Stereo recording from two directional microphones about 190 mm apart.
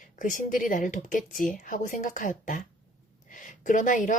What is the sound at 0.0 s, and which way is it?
A woman's voice, 45° left (ahead or behind).